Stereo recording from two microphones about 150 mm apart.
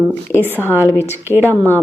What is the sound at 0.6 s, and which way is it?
Speech, 15° left (ahead or behind).